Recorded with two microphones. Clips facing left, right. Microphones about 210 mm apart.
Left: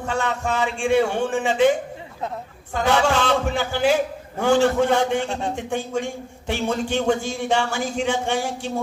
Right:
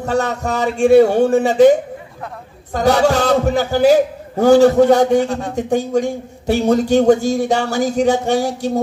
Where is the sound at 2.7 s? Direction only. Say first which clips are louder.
Right 6 dB; 40° right (ahead or behind).